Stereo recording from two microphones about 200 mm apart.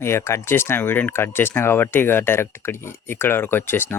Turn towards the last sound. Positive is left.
turn(degrees=10)  # may be behind; listen again after turning